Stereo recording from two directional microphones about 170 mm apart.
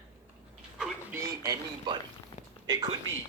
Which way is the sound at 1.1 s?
15° right (ahead or behind).